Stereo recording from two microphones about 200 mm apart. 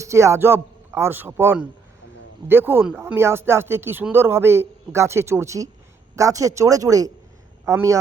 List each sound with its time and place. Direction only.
0.0 s a man's voice: 15° right (ahead or behind)